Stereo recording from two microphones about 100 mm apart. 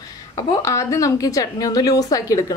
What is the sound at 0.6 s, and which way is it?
A woman's voice, 30° left (ahead or behind).